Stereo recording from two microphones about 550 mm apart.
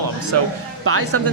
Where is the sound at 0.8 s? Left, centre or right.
Right.